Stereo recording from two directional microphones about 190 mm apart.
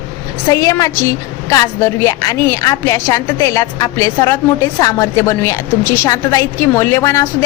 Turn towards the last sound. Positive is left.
turn(degrees=15)  # may be behind; listen again after turning